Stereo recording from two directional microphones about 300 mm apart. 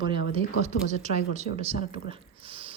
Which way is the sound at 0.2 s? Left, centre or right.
Left.